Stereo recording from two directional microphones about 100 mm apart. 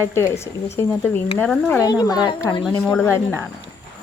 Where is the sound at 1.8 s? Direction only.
40° left (ahead or behind).